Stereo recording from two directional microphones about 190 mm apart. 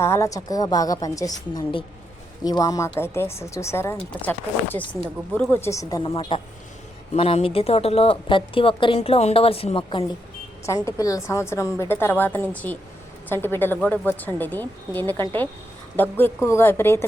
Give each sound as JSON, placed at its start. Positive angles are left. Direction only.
{"t": 0.0, "sound": "a woman's voice", "side_deg": 15}
{"t": 5.3, "sound": "a woman's voice", "side_deg": 10}
{"t": 6.1, "sound": "a woman's voice", "side_deg": 30}
{"t": 10.7, "sound": "a woman's voice", "side_deg": 15}